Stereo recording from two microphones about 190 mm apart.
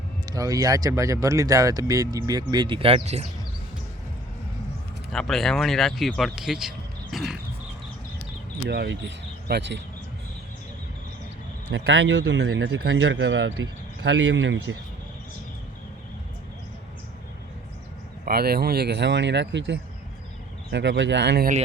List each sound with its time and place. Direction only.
0.3 s speech: 20° right (ahead or behind)
5.1 s speech: centre (ahead or behind)
8.7 s speech: 65° right (ahead or behind)
11.7 s speech: 70° right (ahead or behind)
18.3 s speech: 55° right (ahead or behind)